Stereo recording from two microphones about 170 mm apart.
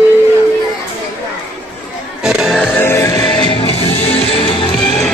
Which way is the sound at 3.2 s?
30° left (ahead or behind).